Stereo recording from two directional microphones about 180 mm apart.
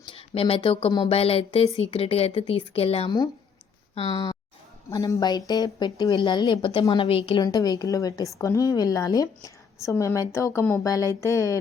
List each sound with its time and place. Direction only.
0.0 s a woman's voice: 30° left (ahead or behind)